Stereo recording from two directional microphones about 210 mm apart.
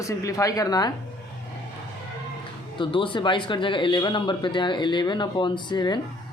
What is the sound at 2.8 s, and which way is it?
Speech, 25° left (ahead or behind).